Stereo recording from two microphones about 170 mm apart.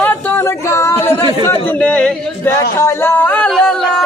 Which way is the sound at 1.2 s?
30° right (ahead or behind).